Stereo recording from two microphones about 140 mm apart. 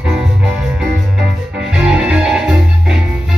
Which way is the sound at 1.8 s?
5° right (ahead or behind).